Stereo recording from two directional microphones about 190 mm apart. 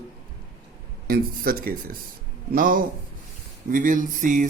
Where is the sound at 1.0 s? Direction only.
50° right (ahead or behind).